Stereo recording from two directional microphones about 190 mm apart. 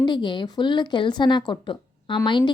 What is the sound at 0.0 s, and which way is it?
Speech, 25° left (ahead or behind).